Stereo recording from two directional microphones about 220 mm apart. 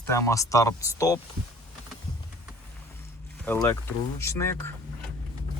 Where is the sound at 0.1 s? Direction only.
15° left (ahead or behind).